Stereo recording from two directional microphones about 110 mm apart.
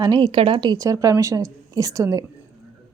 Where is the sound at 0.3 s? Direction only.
55° right (ahead or behind).